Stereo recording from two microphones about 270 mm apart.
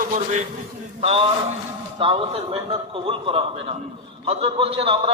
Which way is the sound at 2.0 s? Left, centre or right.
Centre.